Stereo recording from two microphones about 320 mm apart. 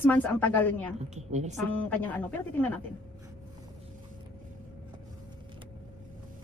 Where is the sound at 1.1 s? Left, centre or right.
Right.